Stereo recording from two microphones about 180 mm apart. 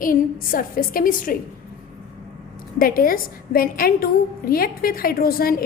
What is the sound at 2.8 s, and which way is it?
A woman's voice, 55° left (ahead or behind).